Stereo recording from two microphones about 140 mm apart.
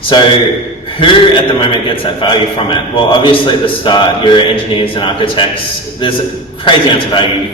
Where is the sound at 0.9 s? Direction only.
35° left (ahead or behind).